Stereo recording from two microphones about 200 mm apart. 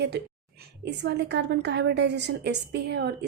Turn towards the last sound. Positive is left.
turn(degrees=-60)  # may be behind; listen again after turning